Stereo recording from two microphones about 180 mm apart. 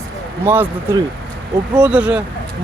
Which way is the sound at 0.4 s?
10° right (ahead or behind).